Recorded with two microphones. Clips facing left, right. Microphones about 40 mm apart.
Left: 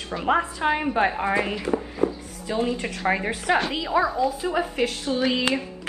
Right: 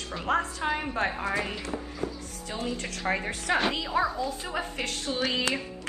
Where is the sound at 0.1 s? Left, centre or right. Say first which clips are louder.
Left 5 dB; centre.